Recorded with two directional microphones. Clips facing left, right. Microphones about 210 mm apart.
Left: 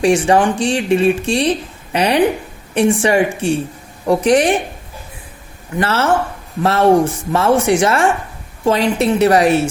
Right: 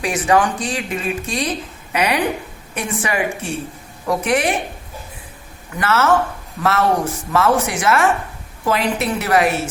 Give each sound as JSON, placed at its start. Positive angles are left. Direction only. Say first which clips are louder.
{"t": 0.0, "sound": "speech", "louder": "left 5 dB", "side_deg": 30}
{"t": 5.7, "sound": "speech", "louder": "left 1 dB", "side_deg": 30}